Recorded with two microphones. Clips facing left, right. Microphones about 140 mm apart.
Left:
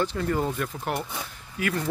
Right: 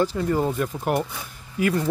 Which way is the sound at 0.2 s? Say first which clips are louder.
Right 4 dB; 15° right (ahead or behind).